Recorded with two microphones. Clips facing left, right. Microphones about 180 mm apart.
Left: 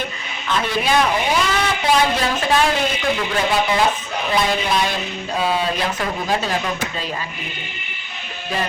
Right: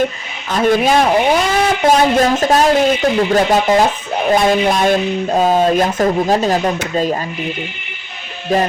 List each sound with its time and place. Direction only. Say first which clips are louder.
0.4 s speech: right 8 dB; 45° right (ahead or behind)